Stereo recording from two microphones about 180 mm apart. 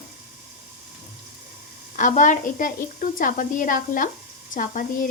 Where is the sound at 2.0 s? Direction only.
45° left (ahead or behind).